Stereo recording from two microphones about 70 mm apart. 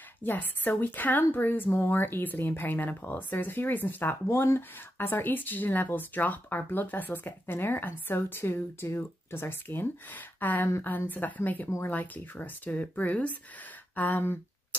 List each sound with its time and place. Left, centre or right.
0.2 s speech: left
4.1 s speech: left
14.2 s a sound: left